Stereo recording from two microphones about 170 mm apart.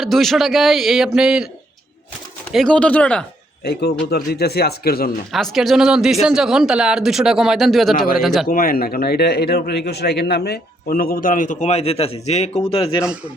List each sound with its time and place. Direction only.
0.0 s speech: centre (ahead or behind)
2.5 s speech: centre (ahead or behind)
3.6 s speech: 70° left (ahead or behind)
5.3 s speech: centre (ahead or behind)
7.9 s a man's voice: 60° left (ahead or behind)
8.2 s speech: centre (ahead or behind)
8.4 s a man's voice: 55° left (ahead or behind); by 13.0 s 35° left (ahead or behind)